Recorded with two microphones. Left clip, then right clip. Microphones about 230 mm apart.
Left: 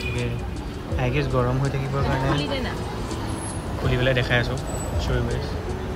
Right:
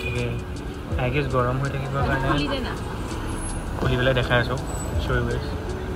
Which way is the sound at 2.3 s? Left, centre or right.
Left.